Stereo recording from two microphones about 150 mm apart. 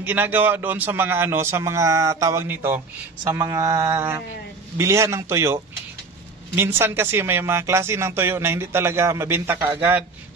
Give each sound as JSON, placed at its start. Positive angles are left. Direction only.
{"t": 0.0, "sound": "speech", "side_deg": -10}
{"t": 3.3, "sound": "mantra", "side_deg": -25}
{"t": 6.5, "sound": "speech", "side_deg": -15}